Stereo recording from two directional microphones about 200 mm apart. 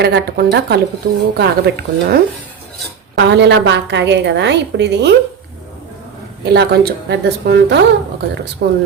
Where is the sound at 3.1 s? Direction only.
60° right (ahead or behind).